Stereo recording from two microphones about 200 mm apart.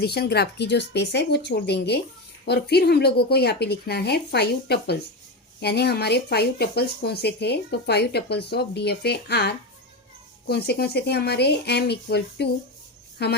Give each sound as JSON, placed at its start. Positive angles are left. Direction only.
{"t": 0.0, "sound": "speech", "side_deg": 55}